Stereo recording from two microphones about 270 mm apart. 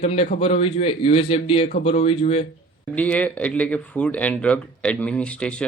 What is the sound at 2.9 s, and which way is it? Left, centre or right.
Speech, centre.